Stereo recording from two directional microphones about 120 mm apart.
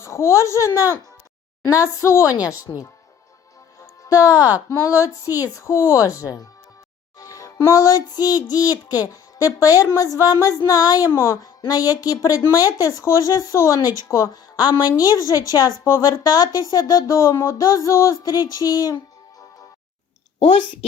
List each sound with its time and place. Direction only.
0.0 s a woman's voice: 25° left (ahead or behind)
2.0 s a woman's voice: 25° left (ahead or behind)
4.3 s speech: 15° right (ahead or behind)
4.7 s a woman's voice: 25° left (ahead or behind)
7.2 s child singing: 25° left (ahead or behind)
9.6 s a woman's voice: 30° left (ahead or behind)